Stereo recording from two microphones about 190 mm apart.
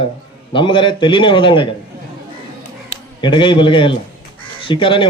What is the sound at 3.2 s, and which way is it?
A man's voice, 25° left (ahead or behind).